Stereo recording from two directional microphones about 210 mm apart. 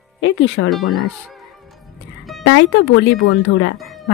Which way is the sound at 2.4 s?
65° left (ahead or behind).